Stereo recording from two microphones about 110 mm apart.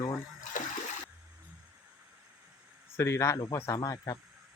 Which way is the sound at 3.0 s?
25° left (ahead or behind).